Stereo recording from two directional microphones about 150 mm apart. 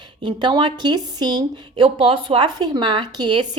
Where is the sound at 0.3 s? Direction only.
30° right (ahead or behind).